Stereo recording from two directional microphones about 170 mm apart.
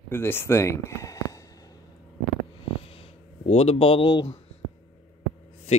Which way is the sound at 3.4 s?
40° left (ahead or behind).